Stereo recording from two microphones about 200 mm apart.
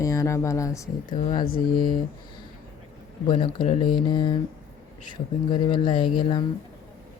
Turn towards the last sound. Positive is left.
turn(degrees=25)  # may be behind; listen again after turning